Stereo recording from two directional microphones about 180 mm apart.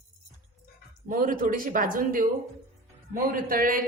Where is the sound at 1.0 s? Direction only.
50° right (ahead or behind).